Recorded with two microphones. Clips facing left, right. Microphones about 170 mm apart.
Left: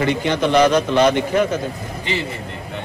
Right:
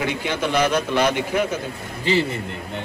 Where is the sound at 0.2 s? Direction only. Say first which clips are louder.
Left 6 dB; 10° right (ahead or behind).